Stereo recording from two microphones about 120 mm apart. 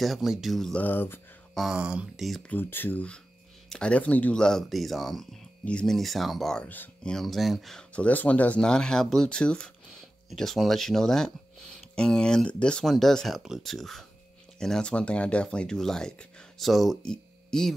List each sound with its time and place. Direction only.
0.0 s speech: centre (ahead or behind)
0.8 s speech: 15° left (ahead or behind)
1.5 s speech: 5° right (ahead or behind)
2.5 s speech: 15° left (ahead or behind)